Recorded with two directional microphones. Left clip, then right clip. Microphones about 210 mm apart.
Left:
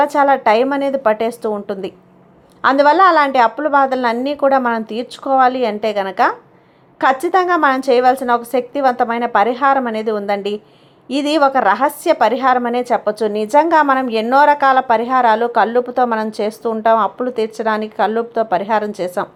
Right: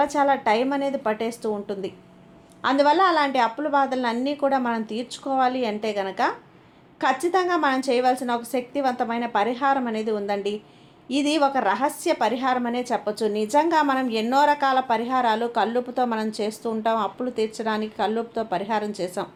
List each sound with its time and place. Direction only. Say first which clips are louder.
0.0 s a woman's voice: left 8 dB; 25° left (ahead or behind)